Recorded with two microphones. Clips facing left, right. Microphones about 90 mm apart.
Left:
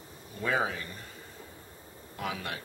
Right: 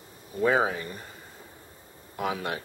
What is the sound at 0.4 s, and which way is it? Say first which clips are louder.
Speech: right 6 dB; 30° right (ahead or behind).